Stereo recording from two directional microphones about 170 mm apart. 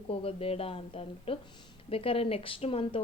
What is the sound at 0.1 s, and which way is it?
A woman's voice, 35° left (ahead or behind).